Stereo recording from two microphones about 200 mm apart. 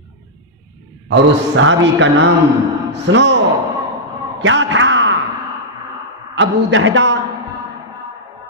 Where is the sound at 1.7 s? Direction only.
65° right (ahead or behind).